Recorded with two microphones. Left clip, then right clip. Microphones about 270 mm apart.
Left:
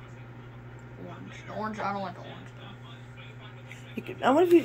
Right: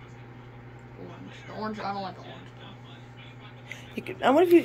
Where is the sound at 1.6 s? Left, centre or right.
Left.